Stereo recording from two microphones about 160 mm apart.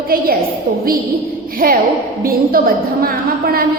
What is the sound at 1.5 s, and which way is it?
A woman's voice, 65° right (ahead or behind).